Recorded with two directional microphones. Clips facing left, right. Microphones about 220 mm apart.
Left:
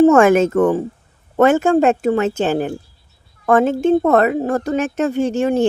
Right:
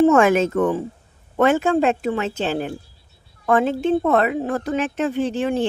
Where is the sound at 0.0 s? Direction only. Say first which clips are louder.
Left 4 dB; 45° left (ahead or behind).